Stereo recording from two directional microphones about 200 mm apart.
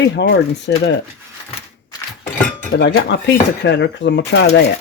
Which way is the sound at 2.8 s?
60° left (ahead or behind).